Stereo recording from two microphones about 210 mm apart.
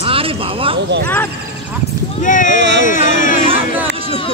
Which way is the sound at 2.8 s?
40° left (ahead or behind).